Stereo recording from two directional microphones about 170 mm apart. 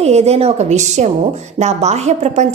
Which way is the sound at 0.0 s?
40° right (ahead or behind).